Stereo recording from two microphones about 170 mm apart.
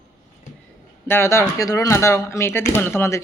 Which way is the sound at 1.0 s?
15° left (ahead or behind).